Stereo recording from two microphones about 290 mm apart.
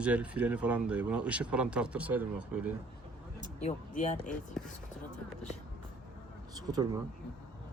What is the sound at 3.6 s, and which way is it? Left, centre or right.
Speech, left.